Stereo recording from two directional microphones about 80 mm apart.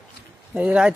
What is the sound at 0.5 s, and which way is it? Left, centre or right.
Speech, centre.